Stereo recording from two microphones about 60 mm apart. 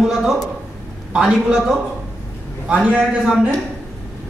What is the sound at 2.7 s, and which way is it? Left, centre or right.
Speech, centre.